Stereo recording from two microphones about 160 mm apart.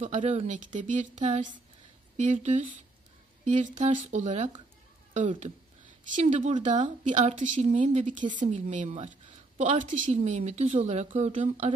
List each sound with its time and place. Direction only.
0.0 s a woman's voice: 45° right (ahead or behind)
6.1 s a woman's voice: 45° right (ahead or behind)